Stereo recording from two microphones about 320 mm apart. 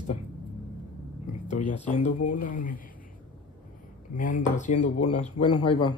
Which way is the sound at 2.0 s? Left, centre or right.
Left.